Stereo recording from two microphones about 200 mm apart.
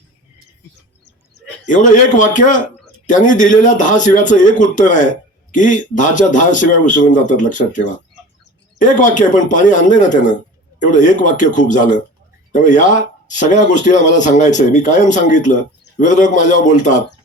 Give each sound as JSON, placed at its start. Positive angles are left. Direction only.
{"t": 1.6, "sound": "a man's voice", "side_deg": 40}